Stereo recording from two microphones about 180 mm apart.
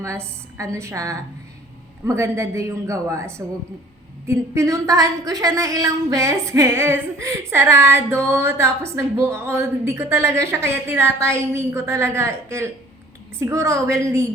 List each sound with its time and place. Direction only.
0.0 s a woman's voice: 15° right (ahead or behind)